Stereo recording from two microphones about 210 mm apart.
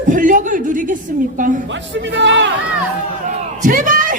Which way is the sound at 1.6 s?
60° right (ahead or behind).